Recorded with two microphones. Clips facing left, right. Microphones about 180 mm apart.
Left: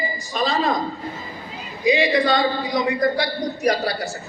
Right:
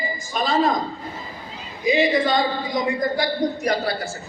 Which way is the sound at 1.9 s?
45° right (ahead or behind).